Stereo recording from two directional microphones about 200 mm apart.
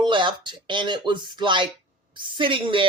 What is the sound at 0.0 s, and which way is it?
Speech, 25° right (ahead or behind).